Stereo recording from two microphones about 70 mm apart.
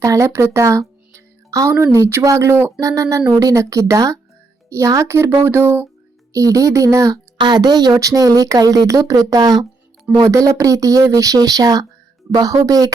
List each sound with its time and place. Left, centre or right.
0.0 s speech: right
2.8 s speech: right
6.3 s speech: right
7.4 s speech: right